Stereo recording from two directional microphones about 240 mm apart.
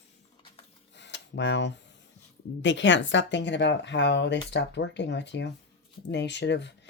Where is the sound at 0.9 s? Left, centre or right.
Left.